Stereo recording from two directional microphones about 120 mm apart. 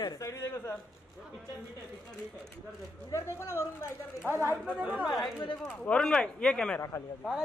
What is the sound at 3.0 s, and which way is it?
Speech, 25° left (ahead or behind).